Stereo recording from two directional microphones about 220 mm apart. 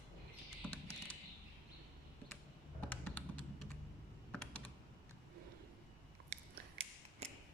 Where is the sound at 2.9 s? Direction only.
5° left (ahead or behind).